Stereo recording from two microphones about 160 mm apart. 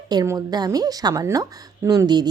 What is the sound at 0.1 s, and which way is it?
A woman's voice, 25° right (ahead or behind).